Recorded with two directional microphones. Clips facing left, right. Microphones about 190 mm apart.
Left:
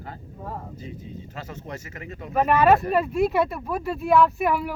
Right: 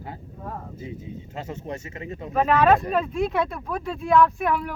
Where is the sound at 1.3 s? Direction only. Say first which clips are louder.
Right 5 dB; 25° right (ahead or behind).